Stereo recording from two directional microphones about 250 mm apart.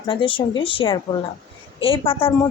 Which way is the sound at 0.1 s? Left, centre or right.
Centre.